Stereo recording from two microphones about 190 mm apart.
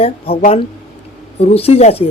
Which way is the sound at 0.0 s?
30° left (ahead or behind).